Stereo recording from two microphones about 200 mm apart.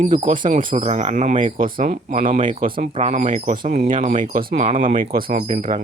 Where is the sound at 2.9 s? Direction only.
35° right (ahead or behind).